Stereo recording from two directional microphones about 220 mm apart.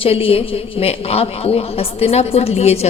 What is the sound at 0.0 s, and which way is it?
Speech, 25° left (ahead or behind).